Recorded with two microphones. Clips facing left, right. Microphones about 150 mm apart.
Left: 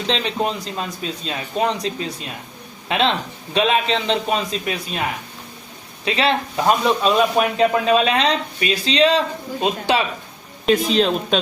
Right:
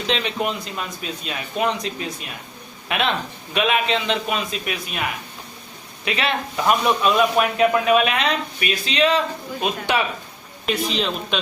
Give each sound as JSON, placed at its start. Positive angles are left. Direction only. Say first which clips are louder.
{"t": 0.1, "sound": "speech", "louder": "left 2 dB", "side_deg": 35}
{"t": 6.1, "sound": "a man's voice", "louder": "left 4 dB", "side_deg": 30}
{"t": 10.7, "sound": "speech", "louder": "left 6 dB", "side_deg": 40}